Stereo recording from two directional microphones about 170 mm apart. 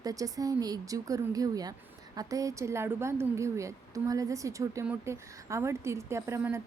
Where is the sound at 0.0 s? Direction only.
20° right (ahead or behind).